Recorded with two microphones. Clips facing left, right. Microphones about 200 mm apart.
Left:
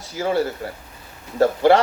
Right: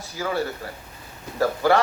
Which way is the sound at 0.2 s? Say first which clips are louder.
Left 5 dB; 25° left (ahead or behind).